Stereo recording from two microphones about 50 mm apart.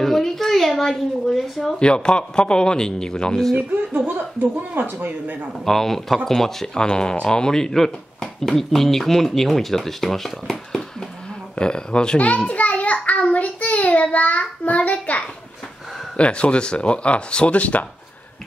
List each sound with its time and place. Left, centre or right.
0.0 s a sound: centre
1.8 s speech: centre
3.5 s speech: right
4.0 s speech: right
5.5 s speech: centre
12.2 s child singing: left
14.1 s speech: left